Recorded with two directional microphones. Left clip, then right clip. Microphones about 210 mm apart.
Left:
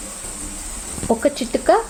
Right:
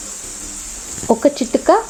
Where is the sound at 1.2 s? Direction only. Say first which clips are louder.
Right 4 dB; 25° right (ahead or behind).